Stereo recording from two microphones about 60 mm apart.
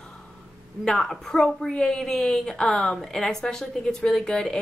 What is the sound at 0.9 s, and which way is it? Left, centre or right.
A woman's voice, centre.